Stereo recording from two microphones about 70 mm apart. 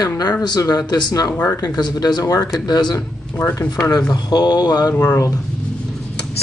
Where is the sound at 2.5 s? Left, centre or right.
Left.